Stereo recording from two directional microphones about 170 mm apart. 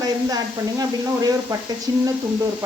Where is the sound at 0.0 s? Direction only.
20° right (ahead or behind).